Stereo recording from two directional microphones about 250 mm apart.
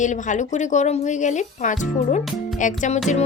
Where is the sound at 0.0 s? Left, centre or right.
Left.